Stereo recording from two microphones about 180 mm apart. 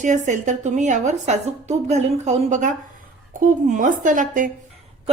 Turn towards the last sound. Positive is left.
turn(degrees=-45)  # may be behind; listen again after turning